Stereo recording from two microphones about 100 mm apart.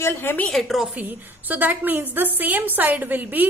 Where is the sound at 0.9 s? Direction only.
15° right (ahead or behind).